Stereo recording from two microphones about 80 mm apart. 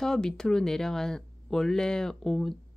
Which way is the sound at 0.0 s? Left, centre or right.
Centre.